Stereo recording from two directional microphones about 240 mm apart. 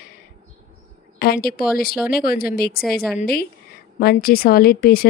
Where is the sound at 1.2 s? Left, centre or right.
Left.